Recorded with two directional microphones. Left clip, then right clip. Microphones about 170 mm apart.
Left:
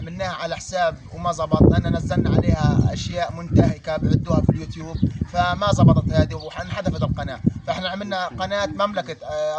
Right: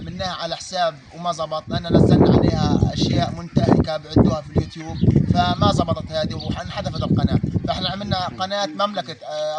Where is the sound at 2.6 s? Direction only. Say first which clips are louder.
Right 2 dB; 35° left (ahead or behind).